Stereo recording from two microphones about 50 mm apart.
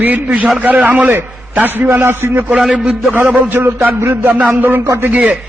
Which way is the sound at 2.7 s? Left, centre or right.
Right.